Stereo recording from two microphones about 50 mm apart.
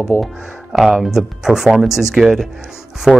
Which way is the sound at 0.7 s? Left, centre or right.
Centre.